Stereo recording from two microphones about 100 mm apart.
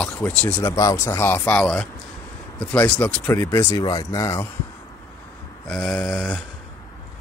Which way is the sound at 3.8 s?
40° left (ahead or behind).